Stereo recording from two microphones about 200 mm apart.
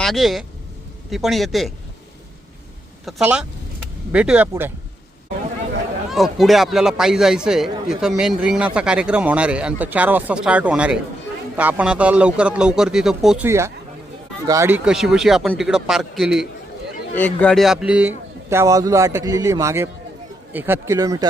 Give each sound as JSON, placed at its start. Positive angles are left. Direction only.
{"t": 0.0, "sound": "a man's voice", "side_deg": 0}
{"t": 3.1, "sound": "speech", "side_deg": -5}
{"t": 6.1, "sound": "a man's voice", "side_deg": 0}
{"t": 14.8, "sound": "a man's voice", "side_deg": 0}